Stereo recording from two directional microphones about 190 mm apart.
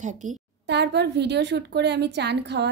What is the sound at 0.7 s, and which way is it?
A woman's voice, 65° right (ahead or behind).